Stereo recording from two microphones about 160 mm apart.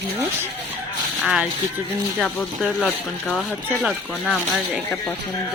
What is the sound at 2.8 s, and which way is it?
Speech, centre (ahead or behind).